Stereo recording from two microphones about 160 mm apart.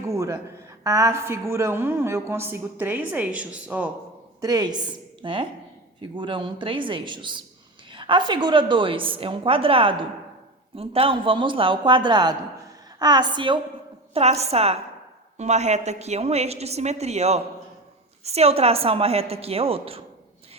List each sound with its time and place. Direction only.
0.1 s a sound: 20° right (ahead or behind)
0.9 s a woman's voice: 20° right (ahead or behind)
4.4 s a woman's voice: 25° right (ahead or behind)
14.1 s a woman's voice: 40° right (ahead or behind)